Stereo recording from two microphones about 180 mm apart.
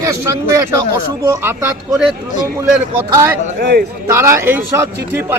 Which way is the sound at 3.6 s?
60° right (ahead or behind).